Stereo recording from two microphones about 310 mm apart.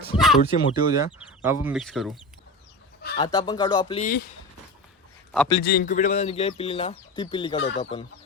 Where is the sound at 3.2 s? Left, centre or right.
Centre.